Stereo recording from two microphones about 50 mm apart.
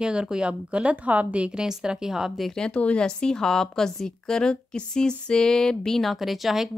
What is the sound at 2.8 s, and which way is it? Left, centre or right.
A woman's voice, left.